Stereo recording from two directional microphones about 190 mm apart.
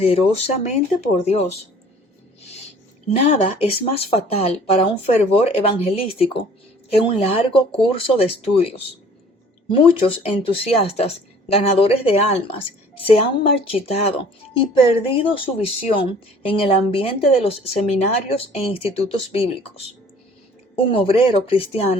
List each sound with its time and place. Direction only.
0.0 s speech: 30° left (ahead or behind)
3.2 s speech: 30° left (ahead or behind)